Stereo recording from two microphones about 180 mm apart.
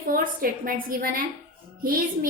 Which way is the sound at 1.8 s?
55° right (ahead or behind).